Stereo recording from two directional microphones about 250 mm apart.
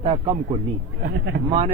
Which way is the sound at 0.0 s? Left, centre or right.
Right.